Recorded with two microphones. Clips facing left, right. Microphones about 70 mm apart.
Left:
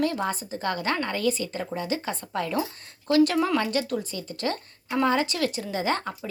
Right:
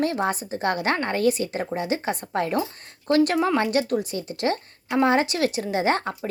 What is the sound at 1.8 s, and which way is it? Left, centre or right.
Frying, right.